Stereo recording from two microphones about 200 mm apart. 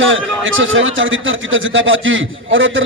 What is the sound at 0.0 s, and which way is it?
A man's voice, 75° right (ahead or behind).